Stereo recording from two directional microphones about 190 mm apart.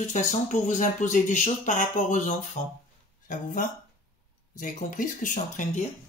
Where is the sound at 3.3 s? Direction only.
40° left (ahead or behind).